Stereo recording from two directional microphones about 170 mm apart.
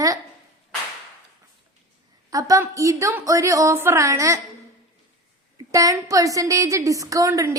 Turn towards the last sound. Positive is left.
turn(degrees=-20)  # may be behind; listen again after turning